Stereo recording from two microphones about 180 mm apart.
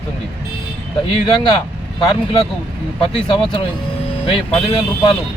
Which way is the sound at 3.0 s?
30° left (ahead or behind).